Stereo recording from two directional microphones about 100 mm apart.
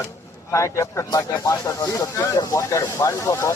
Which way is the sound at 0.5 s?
30° left (ahead or behind).